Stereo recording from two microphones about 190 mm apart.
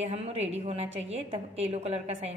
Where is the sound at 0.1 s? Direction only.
35° right (ahead or behind).